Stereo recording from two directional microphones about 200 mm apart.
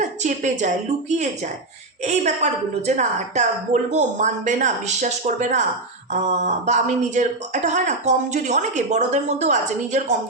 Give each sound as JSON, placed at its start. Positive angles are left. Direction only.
{"t": 0.2, "sound": "speech", "side_deg": -35}
{"t": 2.0, "sound": "speech", "side_deg": -35}